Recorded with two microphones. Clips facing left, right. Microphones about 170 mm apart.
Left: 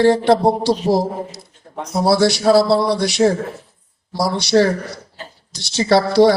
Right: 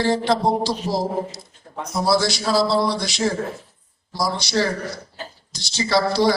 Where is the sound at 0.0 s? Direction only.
65° left (ahead or behind).